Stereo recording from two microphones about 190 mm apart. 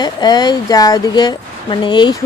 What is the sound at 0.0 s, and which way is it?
Speech, 20° left (ahead or behind).